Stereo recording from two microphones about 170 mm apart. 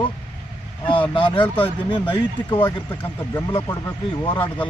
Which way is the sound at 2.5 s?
10° left (ahead or behind).